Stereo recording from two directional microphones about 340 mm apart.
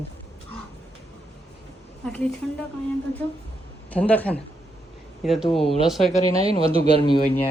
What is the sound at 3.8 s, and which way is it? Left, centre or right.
A woman's voice, centre.